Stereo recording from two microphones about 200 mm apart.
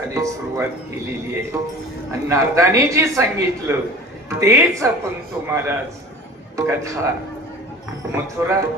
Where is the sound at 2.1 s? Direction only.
15° right (ahead or behind).